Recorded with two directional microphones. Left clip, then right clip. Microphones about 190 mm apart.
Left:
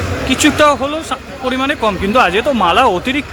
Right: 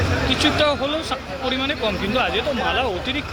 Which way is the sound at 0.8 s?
15° left (ahead or behind).